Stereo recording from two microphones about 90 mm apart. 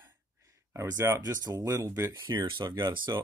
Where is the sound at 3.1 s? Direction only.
40° right (ahead or behind).